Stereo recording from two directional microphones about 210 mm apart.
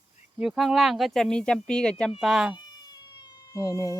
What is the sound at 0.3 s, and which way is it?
Speech, centre (ahead or behind).